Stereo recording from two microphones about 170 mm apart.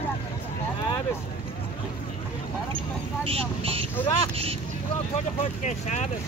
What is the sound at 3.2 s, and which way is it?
Speech, 35° right (ahead or behind).